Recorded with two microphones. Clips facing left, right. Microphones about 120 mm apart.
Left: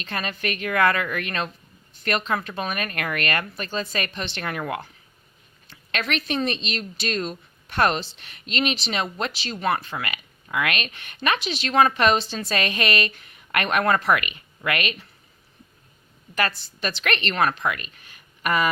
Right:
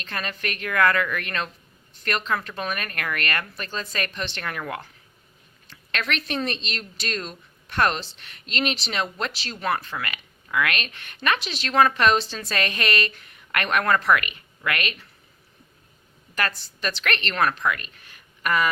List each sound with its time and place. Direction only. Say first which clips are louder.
0.0 s speech: left 2 dB; 15° left (ahead or behind)
6.1 s a woman's voice: left 3 dB; 15° left (ahead or behind)
9.7 s a woman's voice: left 1 dB; 20° left (ahead or behind)
12.5 s a woman's voice: left 1 dB; 15° left (ahead or behind)
16.8 s a woman's voice: left 1 dB; 15° left (ahead or behind)